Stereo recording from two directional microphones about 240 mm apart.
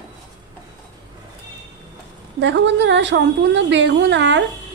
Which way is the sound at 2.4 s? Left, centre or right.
Right.